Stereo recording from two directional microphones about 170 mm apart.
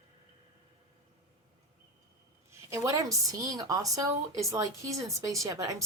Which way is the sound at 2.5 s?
15° right (ahead or behind).